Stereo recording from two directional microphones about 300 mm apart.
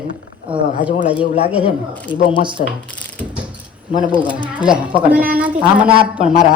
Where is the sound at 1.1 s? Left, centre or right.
Left.